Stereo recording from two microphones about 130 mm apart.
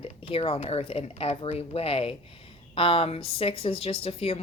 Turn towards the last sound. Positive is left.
turn(degrees=50)  # may be behind; listen again after turning